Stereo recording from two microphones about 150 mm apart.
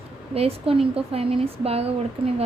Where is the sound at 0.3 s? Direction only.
40° right (ahead or behind).